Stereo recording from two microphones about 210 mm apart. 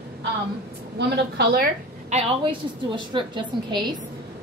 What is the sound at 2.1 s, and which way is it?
A woman's voice, 25° right (ahead or behind).